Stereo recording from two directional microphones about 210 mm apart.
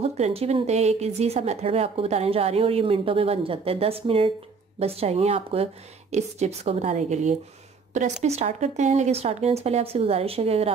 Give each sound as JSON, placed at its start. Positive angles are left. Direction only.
{"t": 0.0, "sound": "speech", "side_deg": -30}